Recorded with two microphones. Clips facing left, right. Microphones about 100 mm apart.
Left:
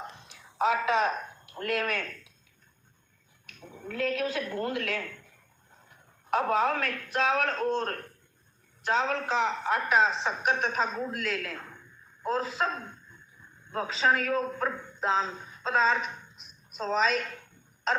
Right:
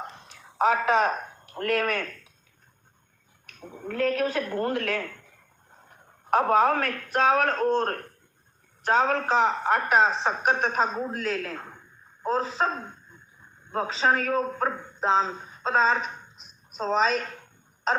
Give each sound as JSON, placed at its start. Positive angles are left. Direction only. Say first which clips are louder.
{"t": 0.3, "sound": "speech", "louder": "right 4 dB", "side_deg": -45}
{"t": 3.4, "sound": "a sound", "louder": "right 5 dB", "side_deg": -45}
{"t": 3.8, "sound": "a woman's voice", "louder": "right 5 dB", "side_deg": -45}